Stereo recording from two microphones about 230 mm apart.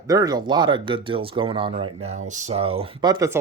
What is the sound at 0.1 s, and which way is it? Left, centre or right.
Speech, centre.